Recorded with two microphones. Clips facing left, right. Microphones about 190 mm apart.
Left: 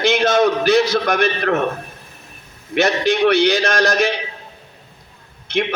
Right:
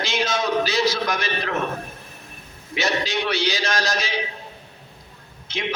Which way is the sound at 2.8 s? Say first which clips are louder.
Left 8 dB; 55° left (ahead or behind).